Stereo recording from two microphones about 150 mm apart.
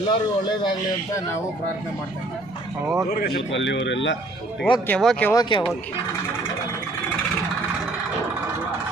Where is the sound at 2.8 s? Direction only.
20° right (ahead or behind).